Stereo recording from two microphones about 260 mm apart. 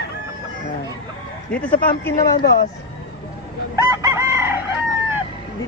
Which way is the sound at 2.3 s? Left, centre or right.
Left.